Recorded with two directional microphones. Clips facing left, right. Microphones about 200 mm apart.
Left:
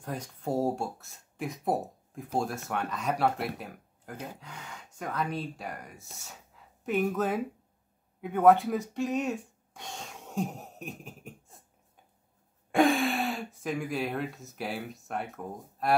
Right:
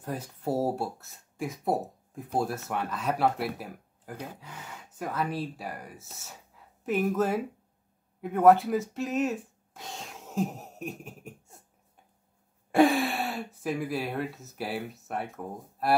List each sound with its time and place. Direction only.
0.0 s speech: 5° right (ahead or behind)
12.7 s speech: centre (ahead or behind)